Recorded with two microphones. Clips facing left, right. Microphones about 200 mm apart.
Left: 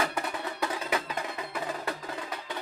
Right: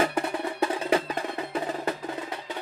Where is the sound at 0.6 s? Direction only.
30° right (ahead or behind).